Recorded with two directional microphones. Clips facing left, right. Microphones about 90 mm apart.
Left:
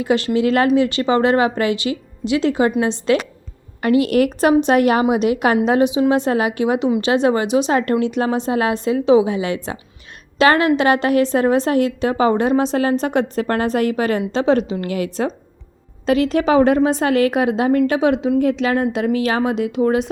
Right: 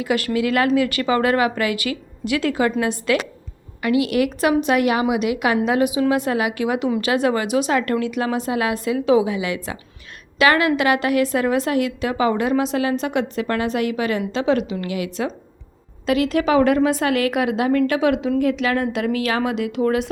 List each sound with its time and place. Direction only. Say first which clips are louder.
0.0 s a woman's voice: left 4 dB; 30° left (ahead or behind)
3.8 s a woman's voice: left 4 dB; 40° left (ahead or behind); by 20.1 s 20° left (ahead or behind)